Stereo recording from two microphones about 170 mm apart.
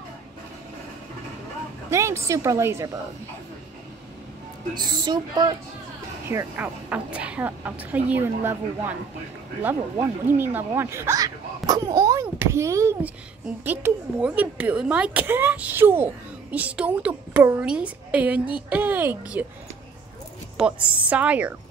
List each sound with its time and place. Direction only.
1.9 s speech: 15° right (ahead or behind)
4.7 s a woman's voice: 25° right (ahead or behind)
6.2 s a woman's voice: 15° right (ahead or behind)
9.9 s speech: 15° right (ahead or behind)
20.5 s speech: 5° right (ahead or behind)